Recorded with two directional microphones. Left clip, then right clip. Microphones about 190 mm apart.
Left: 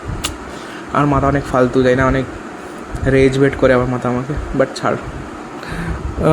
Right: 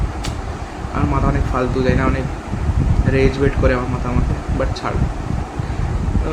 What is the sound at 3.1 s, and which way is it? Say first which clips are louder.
Speech: left 5 dB; 40° left (ahead or behind).